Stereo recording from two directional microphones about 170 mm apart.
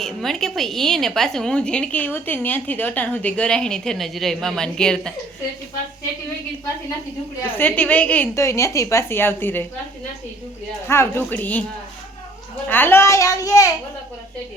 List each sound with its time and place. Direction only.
0.0 s a woman's voice: centre (ahead or behind)
7.4 s a woman's voice: 10° left (ahead or behind)
10.8 s a woman's voice: 15° left (ahead or behind)
12.6 s a woman's voice: 10° left (ahead or behind)